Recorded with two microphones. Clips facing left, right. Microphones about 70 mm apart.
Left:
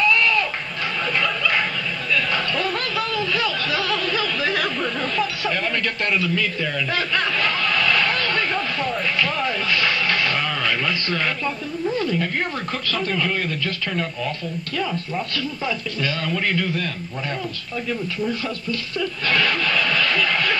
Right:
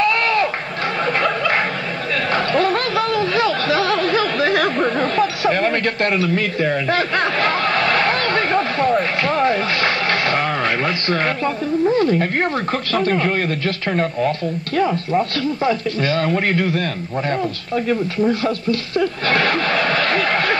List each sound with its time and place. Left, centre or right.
0.0 s goat: right
1.2 s bow-wow: right
2.3 s a sound: right
5.6 s snicker: right
11.9 s speech: right
15.3 s speech: right
18.3 s speech: right
19.2 s a sound: right